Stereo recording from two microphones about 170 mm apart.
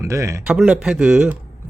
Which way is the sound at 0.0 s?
15° right (ahead or behind).